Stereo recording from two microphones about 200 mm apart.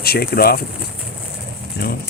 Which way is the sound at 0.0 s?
50° left (ahead or behind).